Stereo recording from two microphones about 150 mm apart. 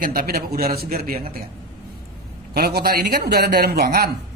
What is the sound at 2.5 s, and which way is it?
Speech, 90° right.